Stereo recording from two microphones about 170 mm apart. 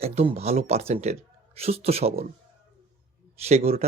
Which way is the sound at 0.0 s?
35° right (ahead or behind).